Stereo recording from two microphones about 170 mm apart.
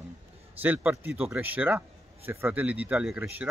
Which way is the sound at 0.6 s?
10° right (ahead or behind).